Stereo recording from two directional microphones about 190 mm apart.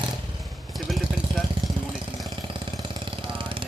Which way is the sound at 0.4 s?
Centre (ahead or behind).